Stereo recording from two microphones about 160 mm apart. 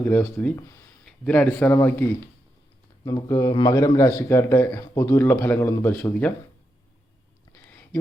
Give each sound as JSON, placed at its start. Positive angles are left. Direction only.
{"t": 0.0, "sound": "a man's voice", "side_deg": 10}
{"t": 1.0, "sound": "a man's voice", "side_deg": 5}
{"t": 7.5, "sound": "a sound", "side_deg": 10}